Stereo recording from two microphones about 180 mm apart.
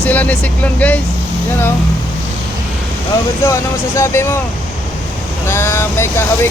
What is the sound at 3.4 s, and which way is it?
Speech, 15° left (ahead or behind).